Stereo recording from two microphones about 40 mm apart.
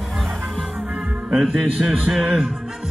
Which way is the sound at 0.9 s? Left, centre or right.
Right.